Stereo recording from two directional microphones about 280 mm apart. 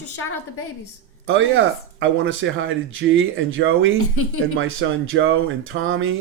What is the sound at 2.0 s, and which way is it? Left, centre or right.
Speech, right.